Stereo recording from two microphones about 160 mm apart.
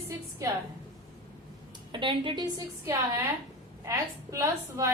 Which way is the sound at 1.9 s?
30° right (ahead or behind).